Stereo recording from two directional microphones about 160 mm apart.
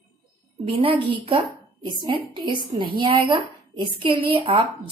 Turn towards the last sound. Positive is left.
turn(degrees=-35)  # may be behind; listen again after turning